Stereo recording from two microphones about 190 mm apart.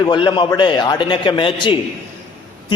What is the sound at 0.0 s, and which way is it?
A man's voice, 25° left (ahead or behind).